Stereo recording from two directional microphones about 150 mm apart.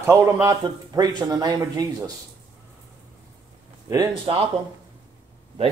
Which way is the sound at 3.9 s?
25° right (ahead or behind).